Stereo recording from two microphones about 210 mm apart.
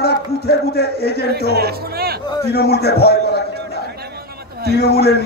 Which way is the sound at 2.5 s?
50° left (ahead or behind).